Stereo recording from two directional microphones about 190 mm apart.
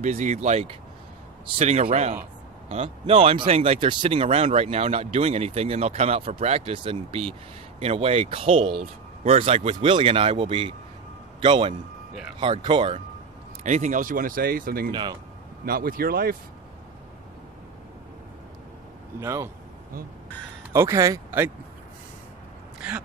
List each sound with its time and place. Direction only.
0.0 s speech: 40° right (ahead or behind)
13.7 s speech: 40° right (ahead or behind)
14.9 s speech: 25° right (ahead or behind)
15.6 s speech: 50° right (ahead or behind)
19.1 s speech: 15° right (ahead or behind)
20.7 s speech: 15° right (ahead or behind)
22.8 s gasp: 5° right (ahead or behind)